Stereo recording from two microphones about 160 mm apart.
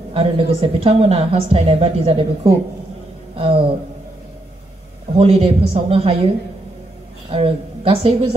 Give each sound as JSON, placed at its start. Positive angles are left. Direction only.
{"t": 0.1, "sound": "a woman's voice", "side_deg": -40}
{"t": 5.1, "sound": "a woman's voice", "side_deg": -40}